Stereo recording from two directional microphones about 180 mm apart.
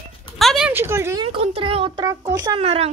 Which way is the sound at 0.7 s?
15° right (ahead or behind).